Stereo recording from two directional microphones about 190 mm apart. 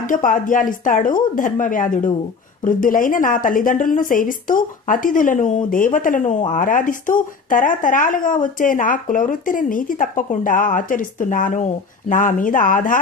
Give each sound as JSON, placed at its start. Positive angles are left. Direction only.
{"t": 0.1, "sound": "a woman's voice", "side_deg": 45}